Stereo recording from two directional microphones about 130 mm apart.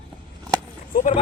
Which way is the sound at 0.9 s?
90° left.